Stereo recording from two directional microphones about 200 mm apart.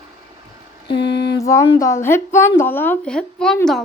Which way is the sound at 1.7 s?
15° left (ahead or behind).